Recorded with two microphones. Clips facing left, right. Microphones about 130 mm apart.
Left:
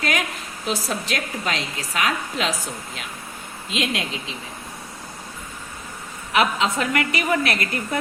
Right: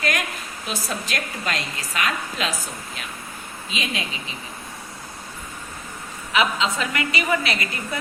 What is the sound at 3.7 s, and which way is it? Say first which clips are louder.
Speech: left 4 dB; 80° left.